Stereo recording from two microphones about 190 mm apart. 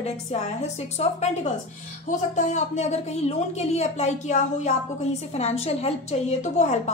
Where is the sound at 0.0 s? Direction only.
35° left (ahead or behind).